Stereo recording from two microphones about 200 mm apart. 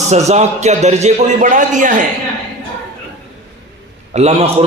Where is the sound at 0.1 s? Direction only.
35° right (ahead or behind).